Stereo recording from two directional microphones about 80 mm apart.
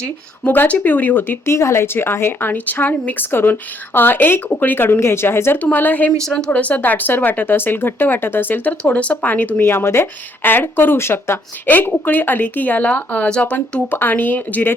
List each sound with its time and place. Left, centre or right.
0.4 s speech: left
1.5 s speech: left
5.5 s speech: left